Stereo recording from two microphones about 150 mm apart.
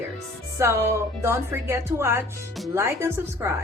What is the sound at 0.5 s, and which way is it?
Speech, 20° right (ahead or behind).